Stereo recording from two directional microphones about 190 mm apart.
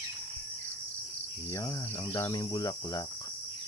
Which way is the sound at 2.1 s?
20° left (ahead or behind).